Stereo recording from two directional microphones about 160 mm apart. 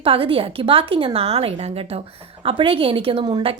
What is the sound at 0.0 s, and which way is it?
Speech, 35° right (ahead or behind).